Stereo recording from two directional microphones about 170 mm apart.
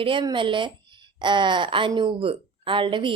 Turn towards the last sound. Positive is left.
turn(degrees=-30)  # may be behind; listen again after turning